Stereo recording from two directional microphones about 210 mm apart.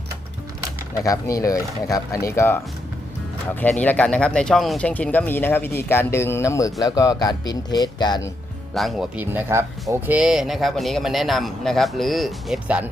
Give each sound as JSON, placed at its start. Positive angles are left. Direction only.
{"t": 0.9, "sound": "speech", "side_deg": 15}
{"t": 8.7, "sound": "a man's voice", "side_deg": 0}